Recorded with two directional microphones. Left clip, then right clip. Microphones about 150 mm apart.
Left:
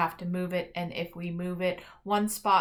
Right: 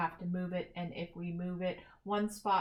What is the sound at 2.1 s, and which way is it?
Speech, 25° left (ahead or behind).